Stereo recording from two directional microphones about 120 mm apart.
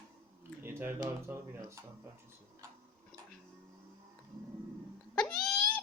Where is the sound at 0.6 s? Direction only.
20° right (ahead or behind).